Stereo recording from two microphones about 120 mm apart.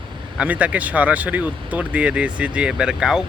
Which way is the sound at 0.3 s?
10° right (ahead or behind).